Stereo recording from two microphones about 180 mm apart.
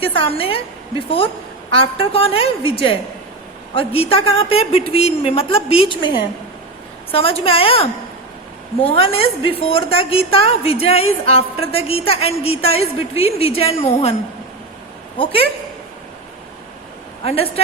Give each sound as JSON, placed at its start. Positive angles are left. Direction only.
{"t": 0.0, "sound": "a woman's voice", "side_deg": 30}
{"t": 1.7, "sound": "a woman's voice", "side_deg": 30}
{"t": 7.1, "sound": "a woman's voice", "side_deg": 30}
{"t": 17.2, "sound": "a woman's voice", "side_deg": 35}